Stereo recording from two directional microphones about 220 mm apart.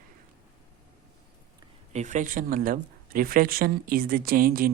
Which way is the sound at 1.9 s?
35° right (ahead or behind).